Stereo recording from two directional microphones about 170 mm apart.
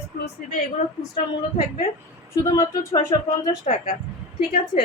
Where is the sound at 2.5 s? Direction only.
15° left (ahead or behind).